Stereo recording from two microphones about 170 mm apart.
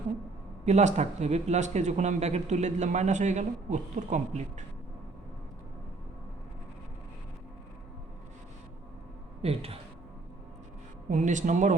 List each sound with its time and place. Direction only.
0.6 s speech: 40° right (ahead or behind)
9.4 s speech: 35° right (ahead or behind)
11.1 s speech: 45° right (ahead or behind)